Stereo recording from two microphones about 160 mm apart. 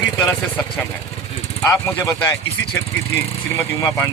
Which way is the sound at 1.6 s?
15° left (ahead or behind).